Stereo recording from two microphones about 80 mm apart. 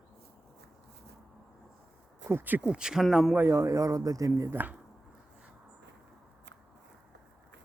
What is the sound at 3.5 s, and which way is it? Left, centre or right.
Speech, right.